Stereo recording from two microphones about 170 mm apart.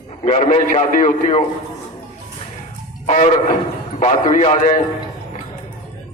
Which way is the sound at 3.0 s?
45° left (ahead or behind).